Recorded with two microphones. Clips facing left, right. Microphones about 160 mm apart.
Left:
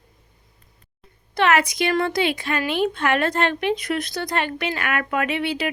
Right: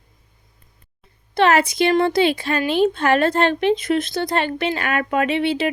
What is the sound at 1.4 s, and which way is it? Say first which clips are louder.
A woman's voice: right 3 dB; 30° right (ahead or behind).